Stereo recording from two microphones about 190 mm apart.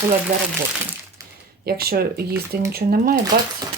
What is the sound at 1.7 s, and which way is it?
Speech, 55° right (ahead or behind).